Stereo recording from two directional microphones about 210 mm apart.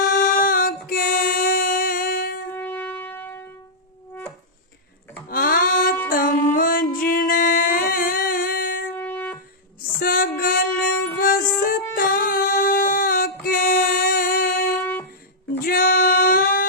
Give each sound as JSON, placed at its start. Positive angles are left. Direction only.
{"t": 0.0, "sound": "female singing", "side_deg": 40}
{"t": 2.6, "sound": "shofar", "side_deg": 10}
{"t": 5.3, "sound": "a sound", "side_deg": 45}
{"t": 6.1, "sound": "music", "side_deg": 40}
{"t": 9.0, "sound": "wind instrument", "side_deg": 10}
{"t": 10.0, "sound": "music", "side_deg": 45}
{"t": 11.6, "sound": "a sound", "side_deg": 40}
{"t": 13.4, "sound": "child singing", "side_deg": 40}
{"t": 15.6, "sound": "music", "side_deg": 40}